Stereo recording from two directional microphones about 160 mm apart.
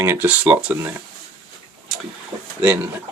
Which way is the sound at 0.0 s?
15° right (ahead or behind).